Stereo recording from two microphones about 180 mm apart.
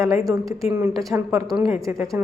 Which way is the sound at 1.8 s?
15° right (ahead or behind).